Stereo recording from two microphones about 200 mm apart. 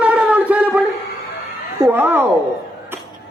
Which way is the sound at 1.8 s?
10° right (ahead or behind).